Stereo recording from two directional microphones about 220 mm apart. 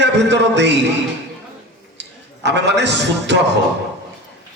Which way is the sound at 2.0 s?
50° right (ahead or behind).